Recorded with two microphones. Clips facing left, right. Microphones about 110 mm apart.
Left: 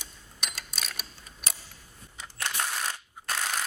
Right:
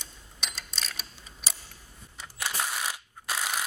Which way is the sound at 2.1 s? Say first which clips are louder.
Even; 5° right (ahead or behind).